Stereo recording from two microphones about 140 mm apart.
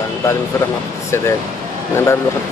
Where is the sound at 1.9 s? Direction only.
20° left (ahead or behind).